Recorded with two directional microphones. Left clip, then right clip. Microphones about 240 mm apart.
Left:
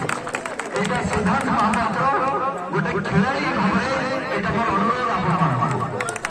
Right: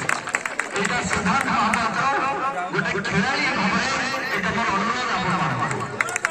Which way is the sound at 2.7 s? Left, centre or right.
Right.